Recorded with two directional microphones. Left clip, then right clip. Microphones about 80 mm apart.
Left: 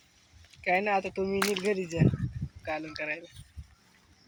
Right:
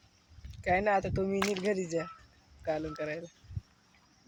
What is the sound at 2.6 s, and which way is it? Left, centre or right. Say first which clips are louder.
Speech: right 1 dB; right.